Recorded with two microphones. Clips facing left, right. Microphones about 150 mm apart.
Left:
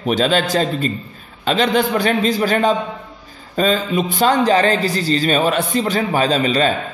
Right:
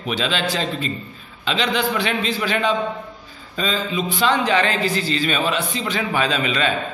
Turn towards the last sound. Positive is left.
turn(degrees=35)  # may be behind; listen again after turning